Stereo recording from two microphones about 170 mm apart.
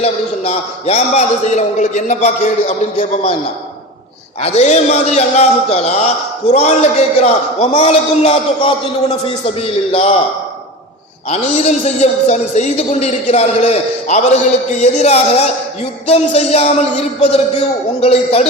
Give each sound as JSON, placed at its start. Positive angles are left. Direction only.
{"t": 0.0, "sound": "a man's voice", "side_deg": 35}
{"t": 4.4, "sound": "a man's voice", "side_deg": 40}
{"t": 11.3, "sound": "a man's voice", "side_deg": 40}